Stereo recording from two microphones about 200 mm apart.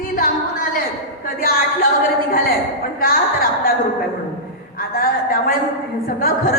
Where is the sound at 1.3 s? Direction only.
45° left (ahead or behind).